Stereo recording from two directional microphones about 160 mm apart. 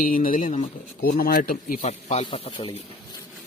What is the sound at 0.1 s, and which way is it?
Speech, 60° left (ahead or behind).